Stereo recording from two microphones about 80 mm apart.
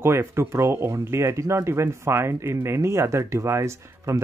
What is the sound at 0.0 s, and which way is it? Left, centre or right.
Speech, right.